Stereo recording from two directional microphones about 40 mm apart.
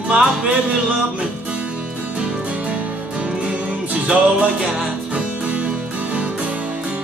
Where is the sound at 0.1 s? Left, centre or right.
Centre.